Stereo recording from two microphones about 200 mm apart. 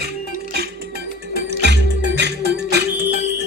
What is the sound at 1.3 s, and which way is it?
Music, 60° right (ahead or behind).